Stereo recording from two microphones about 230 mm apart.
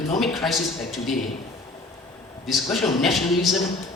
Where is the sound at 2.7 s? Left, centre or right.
Centre.